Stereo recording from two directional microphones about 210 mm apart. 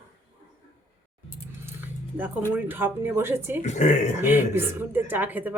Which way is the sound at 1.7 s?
10° right (ahead or behind).